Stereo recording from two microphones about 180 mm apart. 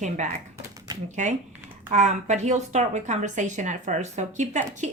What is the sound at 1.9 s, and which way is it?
A woman's voice, 40° right (ahead or behind).